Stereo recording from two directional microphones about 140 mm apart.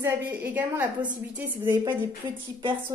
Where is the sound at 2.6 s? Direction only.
35° right (ahead or behind).